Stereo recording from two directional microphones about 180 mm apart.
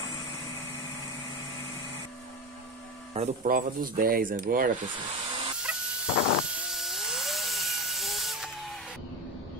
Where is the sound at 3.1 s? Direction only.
40° right (ahead or behind).